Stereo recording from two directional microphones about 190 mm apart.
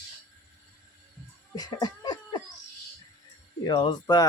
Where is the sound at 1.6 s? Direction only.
20° left (ahead or behind).